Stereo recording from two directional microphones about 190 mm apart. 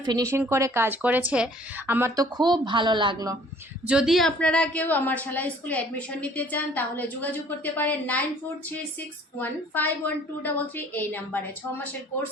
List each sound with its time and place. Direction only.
0.0 s speech: 20° right (ahead or behind)
3.8 s a woman's voice: 5° right (ahead or behind)